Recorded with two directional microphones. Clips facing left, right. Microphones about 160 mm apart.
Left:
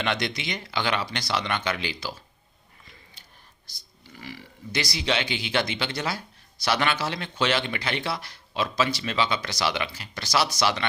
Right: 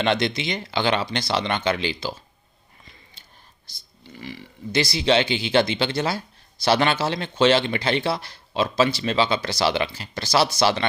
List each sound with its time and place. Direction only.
0.0 s speech: 30° right (ahead or behind)
3.2 s whispering: 25° right (ahead or behind)
3.8 s speech: 25° right (ahead or behind)